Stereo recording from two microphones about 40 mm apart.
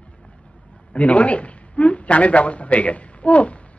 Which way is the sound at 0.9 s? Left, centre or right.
Left.